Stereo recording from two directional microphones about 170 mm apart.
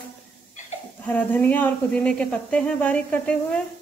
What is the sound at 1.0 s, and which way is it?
A woman's voice, 10° left (ahead or behind).